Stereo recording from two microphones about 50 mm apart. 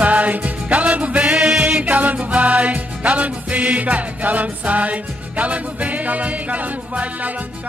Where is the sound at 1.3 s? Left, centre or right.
Centre.